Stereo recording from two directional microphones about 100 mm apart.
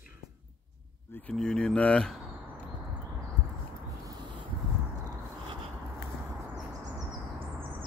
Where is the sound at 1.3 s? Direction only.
5° left (ahead or behind).